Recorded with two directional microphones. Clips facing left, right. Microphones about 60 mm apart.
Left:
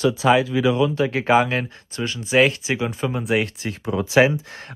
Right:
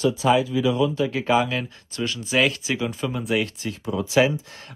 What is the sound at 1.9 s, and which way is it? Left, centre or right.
Speech, left.